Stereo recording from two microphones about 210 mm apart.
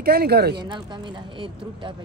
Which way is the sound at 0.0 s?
50° right (ahead or behind).